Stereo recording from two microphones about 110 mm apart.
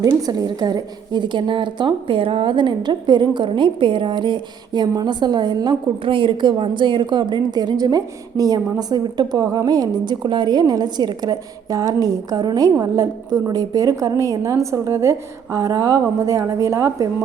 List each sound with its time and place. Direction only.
0.0 s a woman's voice: 35° right (ahead or behind)